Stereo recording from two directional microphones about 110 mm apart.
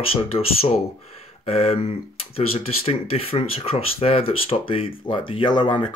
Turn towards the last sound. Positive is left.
turn(degrees=45)  # may be behind; listen again after turning